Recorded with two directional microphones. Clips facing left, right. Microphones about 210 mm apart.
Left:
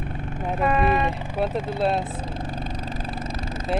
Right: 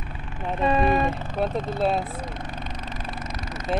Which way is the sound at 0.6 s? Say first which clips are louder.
Right 1 dB; 30° right (ahead or behind).